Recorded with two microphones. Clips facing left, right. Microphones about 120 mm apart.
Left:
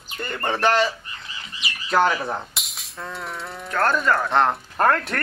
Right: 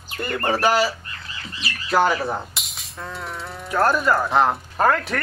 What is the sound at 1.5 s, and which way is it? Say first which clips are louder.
Bird: right 2 dB; 15° left (ahead or behind).